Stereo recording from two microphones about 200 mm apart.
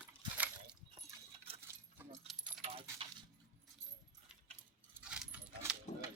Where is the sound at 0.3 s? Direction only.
10° right (ahead or behind).